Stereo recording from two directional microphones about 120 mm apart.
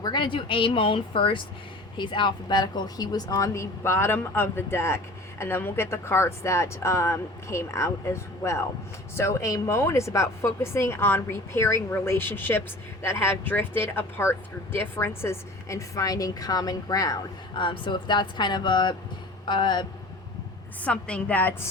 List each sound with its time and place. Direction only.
0.0 s speech: 40° left (ahead or behind)
17.6 s speech: 40° left (ahead or behind)
20.8 s a woman's voice: 10° left (ahead or behind)